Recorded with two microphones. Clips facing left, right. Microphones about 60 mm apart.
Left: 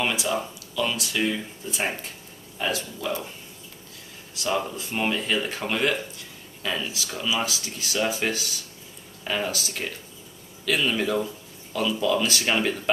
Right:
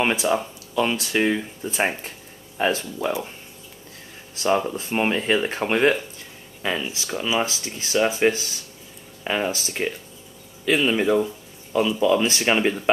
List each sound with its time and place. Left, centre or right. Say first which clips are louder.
0.0 s speech: right 5 dB; right
4.4 s speech: right 5 dB; right